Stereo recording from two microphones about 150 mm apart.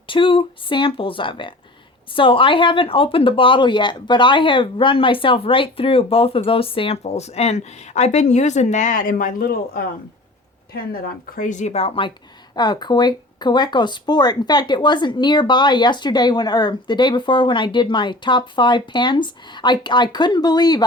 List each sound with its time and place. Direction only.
0.1 s speech: 35° left (ahead or behind); by 9.8 s 85° left
11.0 s speech: 70° left (ahead or behind); by 20.8 s 25° left (ahead or behind)